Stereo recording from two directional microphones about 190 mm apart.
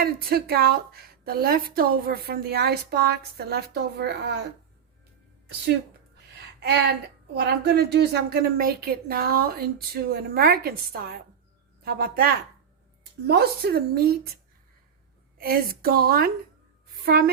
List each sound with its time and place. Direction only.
0.0 s a woman's voice: 55° right (ahead or behind)
6.3 s a sound: 60° right (ahead or behind)
7.3 s a woman's voice: 60° right (ahead or behind)
15.4 s a woman's voice: 50° right (ahead or behind)